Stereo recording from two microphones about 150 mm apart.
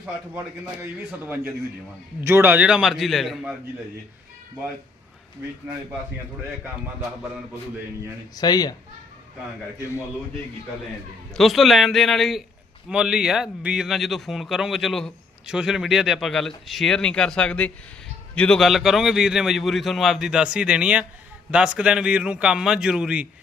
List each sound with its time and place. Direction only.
0.0 s a man's voice: 15° right (ahead or behind)
8.4 s speech: 25° left (ahead or behind)
11.3 s a man's voice: centre (ahead or behind)